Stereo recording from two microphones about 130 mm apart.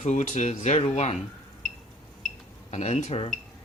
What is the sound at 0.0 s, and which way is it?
Speech, 65° left (ahead or behind).